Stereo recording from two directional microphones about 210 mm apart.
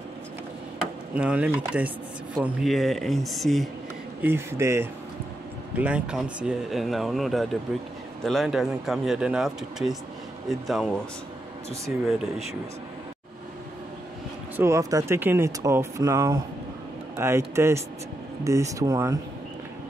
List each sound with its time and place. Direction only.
1.1 s speech: 5° right (ahead or behind)
4.2 s speech: 10° right (ahead or behind)
14.6 s speech: 15° right (ahead or behind)